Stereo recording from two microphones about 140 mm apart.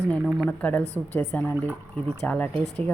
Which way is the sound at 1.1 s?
20° left (ahead or behind).